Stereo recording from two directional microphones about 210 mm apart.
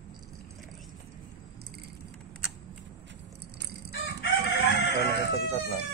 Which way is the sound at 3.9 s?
50° left (ahead or behind).